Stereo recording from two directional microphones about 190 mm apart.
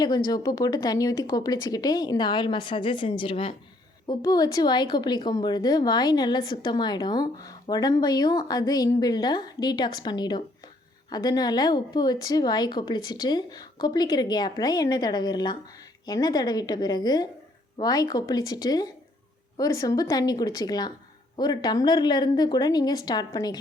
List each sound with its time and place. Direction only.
0.0 s a woman's voice: 20° left (ahead or behind)